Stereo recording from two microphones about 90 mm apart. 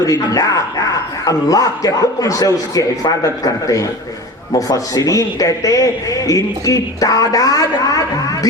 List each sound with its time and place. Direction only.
0.0 s a man's voice: 40° left (ahead or behind)